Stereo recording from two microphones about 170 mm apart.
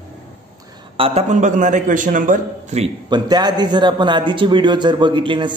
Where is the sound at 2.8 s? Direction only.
25° right (ahead or behind).